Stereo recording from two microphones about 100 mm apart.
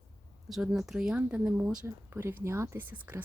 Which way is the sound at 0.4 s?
5° right (ahead or behind).